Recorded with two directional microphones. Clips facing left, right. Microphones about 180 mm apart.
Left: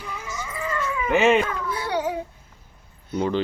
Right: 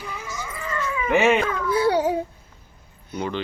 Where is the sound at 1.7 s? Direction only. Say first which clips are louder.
Right 7 dB; 30° right (ahead or behind).